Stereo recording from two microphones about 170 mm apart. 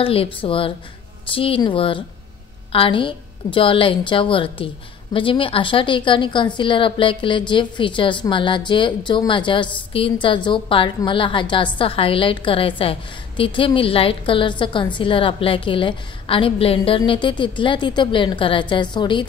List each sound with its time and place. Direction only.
0.0 s a woman's voice: 35° left (ahead or behind)